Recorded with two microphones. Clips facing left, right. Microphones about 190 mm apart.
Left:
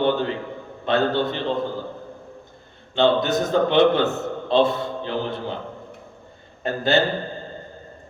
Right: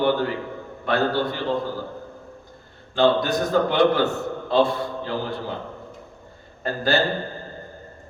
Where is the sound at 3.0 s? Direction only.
20° left (ahead or behind).